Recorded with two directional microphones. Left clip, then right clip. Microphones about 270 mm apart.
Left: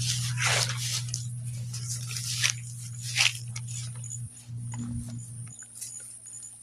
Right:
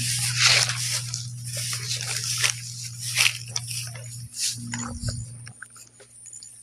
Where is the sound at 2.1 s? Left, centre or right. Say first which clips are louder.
Right 2 dB; right.